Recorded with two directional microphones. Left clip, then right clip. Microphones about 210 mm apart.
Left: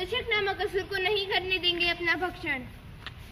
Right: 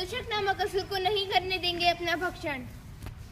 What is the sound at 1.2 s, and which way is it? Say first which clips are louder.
A woman's voice: left 1 dB; 10° right (ahead or behind).